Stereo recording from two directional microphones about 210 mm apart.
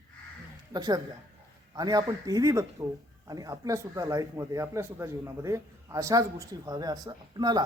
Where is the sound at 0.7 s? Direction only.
20° right (ahead or behind).